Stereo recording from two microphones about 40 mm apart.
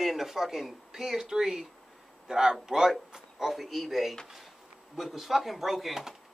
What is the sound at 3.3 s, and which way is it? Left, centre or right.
Speech, centre.